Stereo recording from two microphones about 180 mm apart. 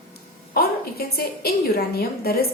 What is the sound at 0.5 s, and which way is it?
A woman's voice, 60° left (ahead or behind).